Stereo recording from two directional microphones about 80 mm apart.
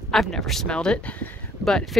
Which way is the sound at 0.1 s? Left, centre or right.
Centre.